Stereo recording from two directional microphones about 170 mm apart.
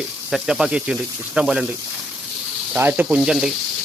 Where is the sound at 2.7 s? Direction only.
10° right (ahead or behind).